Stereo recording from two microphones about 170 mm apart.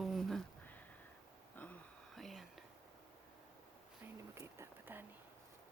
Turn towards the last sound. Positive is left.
turn(degrees=-15)  # may be behind; listen again after turning